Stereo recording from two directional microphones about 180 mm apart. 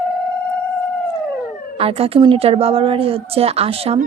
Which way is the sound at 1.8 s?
30° right (ahead or behind).